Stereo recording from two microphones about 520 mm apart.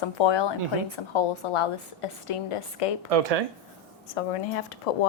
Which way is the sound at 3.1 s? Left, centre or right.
Right.